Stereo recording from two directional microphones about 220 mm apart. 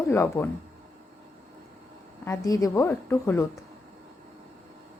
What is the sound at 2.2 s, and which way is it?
A woman's voice, 15° left (ahead or behind).